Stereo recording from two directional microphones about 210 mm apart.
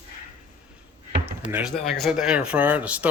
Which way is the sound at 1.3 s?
10° right (ahead or behind).